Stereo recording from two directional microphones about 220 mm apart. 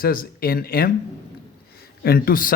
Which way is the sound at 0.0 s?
40° left (ahead or behind).